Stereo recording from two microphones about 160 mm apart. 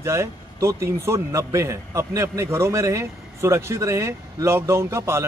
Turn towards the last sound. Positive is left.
turn(degrees=-15)  # may be behind; listen again after turning